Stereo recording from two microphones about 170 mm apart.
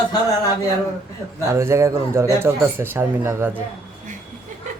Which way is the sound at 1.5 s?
15° right (ahead or behind).